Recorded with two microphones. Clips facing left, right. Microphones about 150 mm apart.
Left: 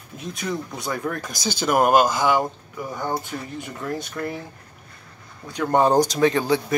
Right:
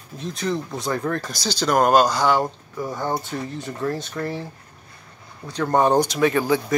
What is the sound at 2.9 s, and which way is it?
Speech, 15° right (ahead or behind).